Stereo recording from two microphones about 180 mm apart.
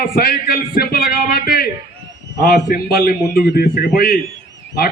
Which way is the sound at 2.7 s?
60° left (ahead or behind).